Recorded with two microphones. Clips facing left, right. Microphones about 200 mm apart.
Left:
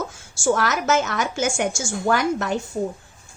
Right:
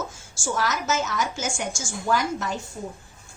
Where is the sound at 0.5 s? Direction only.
65° left (ahead or behind).